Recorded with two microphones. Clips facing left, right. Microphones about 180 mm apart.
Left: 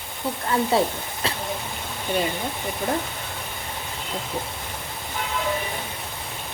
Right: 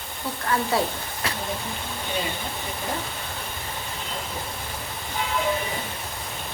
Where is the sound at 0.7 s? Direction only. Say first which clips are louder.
Left 4 dB; 25° left (ahead or behind).